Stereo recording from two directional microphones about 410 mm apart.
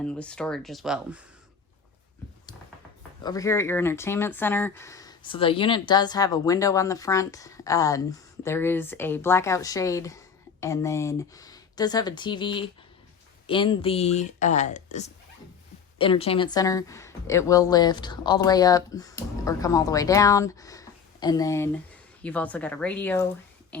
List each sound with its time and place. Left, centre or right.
0.0 s speech: centre
3.2 s a woman's voice: centre